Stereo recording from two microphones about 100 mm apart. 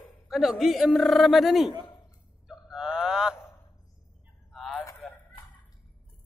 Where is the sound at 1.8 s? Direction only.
50° left (ahead or behind).